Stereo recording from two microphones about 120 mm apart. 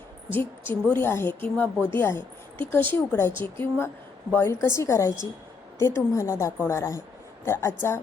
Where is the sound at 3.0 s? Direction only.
20° left (ahead or behind).